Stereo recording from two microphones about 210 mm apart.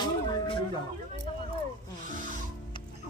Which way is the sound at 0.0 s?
20° left (ahead or behind).